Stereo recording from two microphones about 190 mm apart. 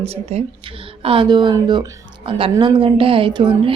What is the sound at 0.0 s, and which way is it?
A woman's voice, 30° right (ahead or behind).